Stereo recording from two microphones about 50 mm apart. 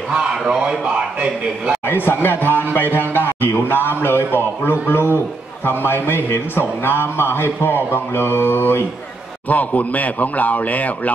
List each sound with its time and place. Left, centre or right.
0.3 s a man's voice: centre
2.0 s a man's voice: left
9.5 s a man's voice: left